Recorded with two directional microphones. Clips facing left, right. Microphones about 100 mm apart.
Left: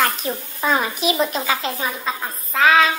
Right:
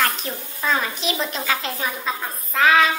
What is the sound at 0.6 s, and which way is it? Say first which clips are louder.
A child's voice: left 3 dB; 15° left (ahead or behind).